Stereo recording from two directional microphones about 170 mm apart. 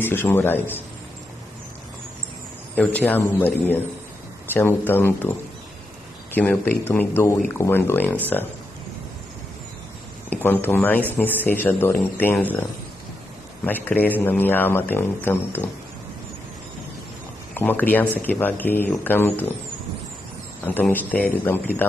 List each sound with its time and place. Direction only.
0.0 s a man's voice: 15° left (ahead or behind)
2.7 s a man's voice: 10° left (ahead or behind)
6.3 s a man's voice: 10° left (ahead or behind)
10.3 s a man's voice: 10° left (ahead or behind)
13.7 s a man's voice: 10° left (ahead or behind)
17.6 s a man's voice: 10° left (ahead or behind)
20.6 s a man's voice: 10° left (ahead or behind)